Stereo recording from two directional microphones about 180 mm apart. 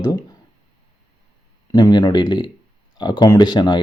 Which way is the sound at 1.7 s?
25° left (ahead or behind).